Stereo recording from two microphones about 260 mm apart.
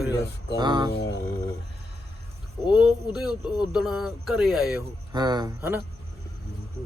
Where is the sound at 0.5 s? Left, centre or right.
Centre.